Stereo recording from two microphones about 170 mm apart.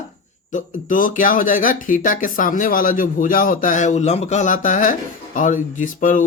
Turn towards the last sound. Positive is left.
turn(degrees=50)  # may be behind; listen again after turning